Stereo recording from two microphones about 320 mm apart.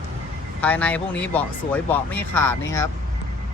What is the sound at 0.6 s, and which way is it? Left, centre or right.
Speech, centre.